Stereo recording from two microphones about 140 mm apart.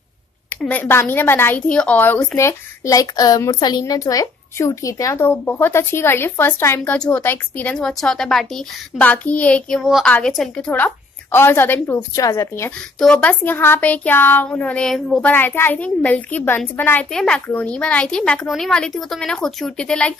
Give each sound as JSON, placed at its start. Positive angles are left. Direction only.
{"t": 0.6, "sound": "a woman's voice", "side_deg": 10}
{"t": 13.0, "sound": "a woman's voice", "side_deg": 5}
{"t": 15.3, "sound": "a woman's voice", "side_deg": 15}